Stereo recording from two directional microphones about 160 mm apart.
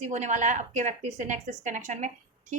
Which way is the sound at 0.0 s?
45° right (ahead or behind).